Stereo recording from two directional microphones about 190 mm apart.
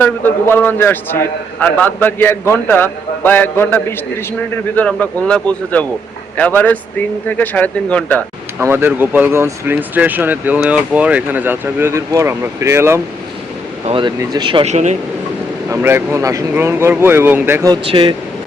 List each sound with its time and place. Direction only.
0.0 s a man's voice: 10° left (ahead or behind)
8.5 s speech: 10° right (ahead or behind)
13.8 s speech: 30° right (ahead or behind)
15.7 s speech: 10° right (ahead or behind)
17.8 s speech: 25° right (ahead or behind)